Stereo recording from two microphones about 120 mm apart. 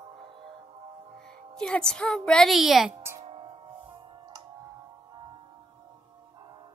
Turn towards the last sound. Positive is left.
turn(degrees=-35)  # may be behind; listen again after turning